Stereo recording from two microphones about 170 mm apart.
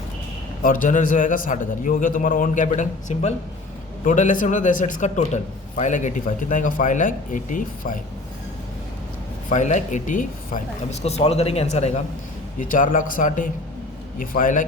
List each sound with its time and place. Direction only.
0.6 s a man's voice: 55° left (ahead or behind)
9.5 s a man's voice: 45° left (ahead or behind)
11.0 s a man's voice: 40° left (ahead or behind)